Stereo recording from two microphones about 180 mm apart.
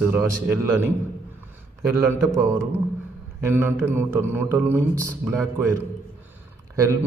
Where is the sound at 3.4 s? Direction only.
10° right (ahead or behind).